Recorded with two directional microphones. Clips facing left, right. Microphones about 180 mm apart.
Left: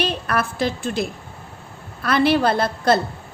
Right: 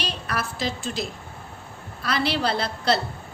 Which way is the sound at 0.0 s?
55° left (ahead or behind).